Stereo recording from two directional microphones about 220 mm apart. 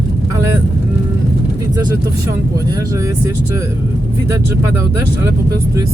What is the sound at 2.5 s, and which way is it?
Speech, 15° right (ahead or behind).